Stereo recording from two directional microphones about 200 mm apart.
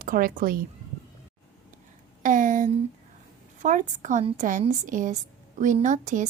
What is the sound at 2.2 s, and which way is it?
A woman's voice, 40° right (ahead or behind).